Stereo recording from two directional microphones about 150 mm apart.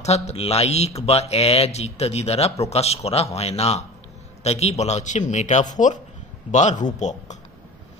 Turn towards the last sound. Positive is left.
turn(degrees=50)  # may be behind; listen again after turning